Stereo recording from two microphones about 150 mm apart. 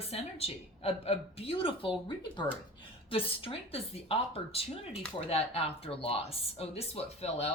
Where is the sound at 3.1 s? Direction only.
40° left (ahead or behind).